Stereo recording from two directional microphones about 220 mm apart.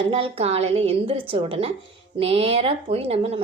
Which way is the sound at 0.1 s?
25° right (ahead or behind).